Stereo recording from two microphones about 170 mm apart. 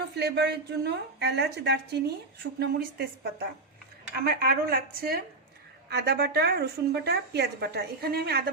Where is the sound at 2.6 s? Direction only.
65° right (ahead or behind).